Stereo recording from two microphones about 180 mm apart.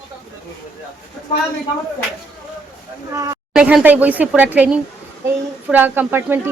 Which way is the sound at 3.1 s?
20° right (ahead or behind).